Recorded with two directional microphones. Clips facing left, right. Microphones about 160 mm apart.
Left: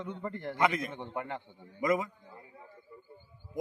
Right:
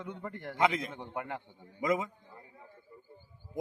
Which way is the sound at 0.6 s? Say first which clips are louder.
Even; 25° right (ahead or behind).